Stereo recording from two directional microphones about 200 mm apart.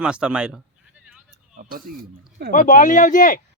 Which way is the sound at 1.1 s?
Centre (ahead or behind).